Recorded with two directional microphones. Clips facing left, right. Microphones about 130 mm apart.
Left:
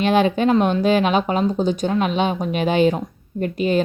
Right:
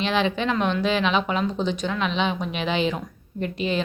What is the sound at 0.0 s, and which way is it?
Speech, 45° left (ahead or behind).